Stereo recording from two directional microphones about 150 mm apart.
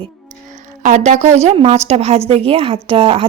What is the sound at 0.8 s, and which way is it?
Speech, 55° right (ahead or behind).